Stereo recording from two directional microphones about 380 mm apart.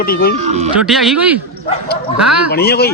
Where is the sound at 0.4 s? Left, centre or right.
Centre.